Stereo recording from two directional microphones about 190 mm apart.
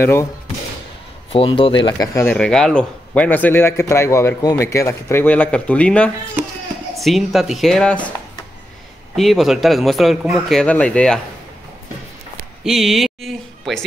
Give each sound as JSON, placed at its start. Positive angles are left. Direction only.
{"t": 0.0, "sound": "speech", "side_deg": 15}
{"t": 1.3, "sound": "speech", "side_deg": 30}
{"t": 2.3, "sound": "a man's voice", "side_deg": 5}
{"t": 9.1, "sound": "a man's voice", "side_deg": 0}
{"t": 12.6, "sound": "speech", "side_deg": 0}